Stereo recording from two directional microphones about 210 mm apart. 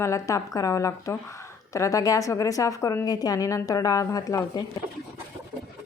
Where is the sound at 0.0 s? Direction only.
15° left (ahead or behind).